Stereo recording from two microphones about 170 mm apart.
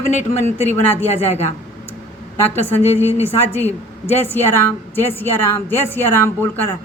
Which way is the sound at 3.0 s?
15° right (ahead or behind).